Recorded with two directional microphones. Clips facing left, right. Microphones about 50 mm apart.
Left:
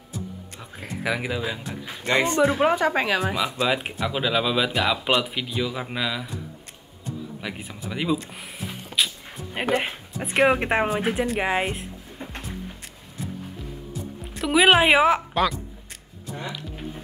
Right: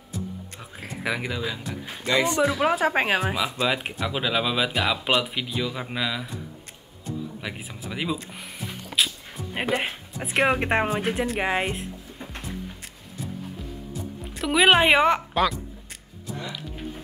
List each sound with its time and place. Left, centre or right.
0.6 s speech: centre
2.0 s speech: left
2.7 s speech: centre
3.3 s speech: centre
14.2 s speech: centre